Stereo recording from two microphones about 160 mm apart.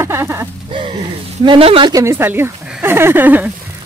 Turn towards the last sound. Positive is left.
turn(degrees=-10)  # may be behind; listen again after turning